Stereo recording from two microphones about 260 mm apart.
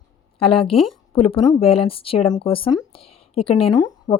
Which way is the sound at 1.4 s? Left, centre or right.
Centre.